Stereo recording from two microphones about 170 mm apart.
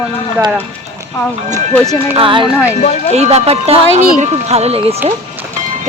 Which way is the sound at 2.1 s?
30° right (ahead or behind).